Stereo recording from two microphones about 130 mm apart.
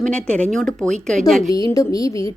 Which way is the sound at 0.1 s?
10° left (ahead or behind).